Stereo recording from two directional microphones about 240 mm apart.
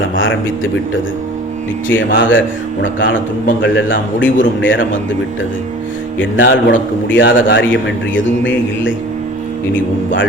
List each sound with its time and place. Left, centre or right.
0.2 s a man's voice: left
2.1 s a man's voice: left
6.1 s a man's voice: left